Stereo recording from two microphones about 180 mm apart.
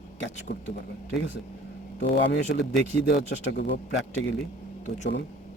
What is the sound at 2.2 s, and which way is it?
Speech, 85° left.